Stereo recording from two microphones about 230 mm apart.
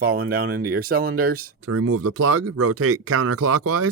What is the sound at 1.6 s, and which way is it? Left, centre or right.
Speech, right.